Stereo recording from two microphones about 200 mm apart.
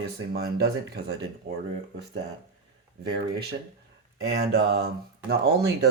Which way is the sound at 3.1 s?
55° right (ahead or behind).